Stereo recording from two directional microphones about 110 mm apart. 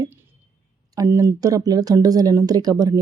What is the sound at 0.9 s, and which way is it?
Speech, 30° right (ahead or behind).